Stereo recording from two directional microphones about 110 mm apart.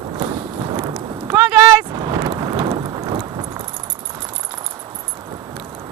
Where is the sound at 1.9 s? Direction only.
40° right (ahead or behind).